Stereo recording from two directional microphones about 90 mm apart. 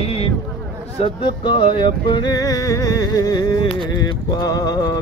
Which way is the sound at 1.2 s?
70° left (ahead or behind).